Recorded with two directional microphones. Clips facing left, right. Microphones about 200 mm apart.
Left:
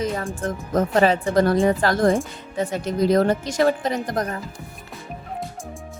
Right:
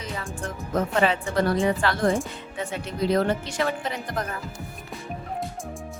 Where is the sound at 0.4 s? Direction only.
40° left (ahead or behind).